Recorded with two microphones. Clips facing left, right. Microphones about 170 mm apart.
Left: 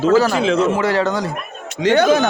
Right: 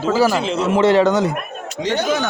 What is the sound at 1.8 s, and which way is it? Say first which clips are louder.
Speech: left 6 dB; 60° left (ahead or behind).